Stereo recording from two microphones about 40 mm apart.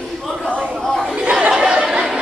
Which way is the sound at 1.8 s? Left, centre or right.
Centre.